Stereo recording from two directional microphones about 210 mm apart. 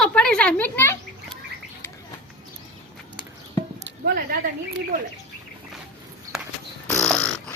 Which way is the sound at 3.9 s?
45° right (ahead or behind).